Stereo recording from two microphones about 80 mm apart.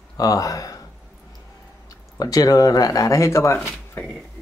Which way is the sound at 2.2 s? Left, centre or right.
Left.